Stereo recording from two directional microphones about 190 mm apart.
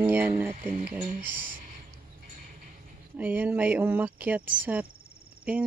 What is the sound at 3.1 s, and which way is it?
Speech, 10° right (ahead or behind).